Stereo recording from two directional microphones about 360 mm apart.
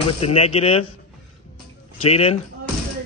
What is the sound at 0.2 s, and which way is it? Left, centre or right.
Speech, centre.